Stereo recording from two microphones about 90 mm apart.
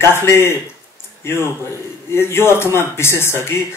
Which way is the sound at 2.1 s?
30° left (ahead or behind).